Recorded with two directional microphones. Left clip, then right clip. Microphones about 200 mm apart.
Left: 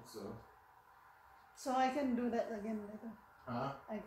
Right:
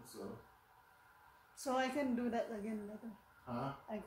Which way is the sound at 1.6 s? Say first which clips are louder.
Left 2 dB; 20° right (ahead or behind).